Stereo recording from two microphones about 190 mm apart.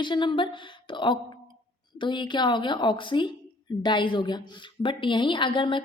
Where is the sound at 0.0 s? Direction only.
25° left (ahead or behind).